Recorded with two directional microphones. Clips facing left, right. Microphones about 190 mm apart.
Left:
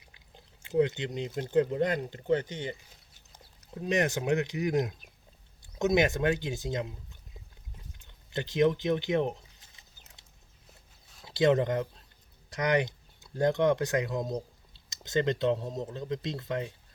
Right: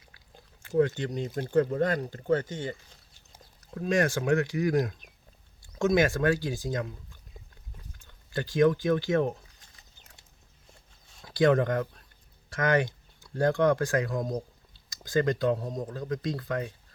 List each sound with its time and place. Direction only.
0.0 s a sound: 20° left (ahead or behind)
1.4 s speech: 20° left (ahead or behind)
11.3 s speech: 20° left (ahead or behind)